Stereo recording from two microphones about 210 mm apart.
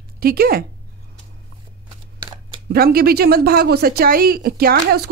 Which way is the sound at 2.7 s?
45° right (ahead or behind).